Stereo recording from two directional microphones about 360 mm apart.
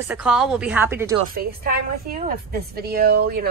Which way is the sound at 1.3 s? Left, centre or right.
Right.